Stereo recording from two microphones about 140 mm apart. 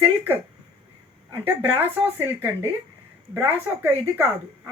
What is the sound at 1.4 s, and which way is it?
A woman's voice, 15° right (ahead or behind).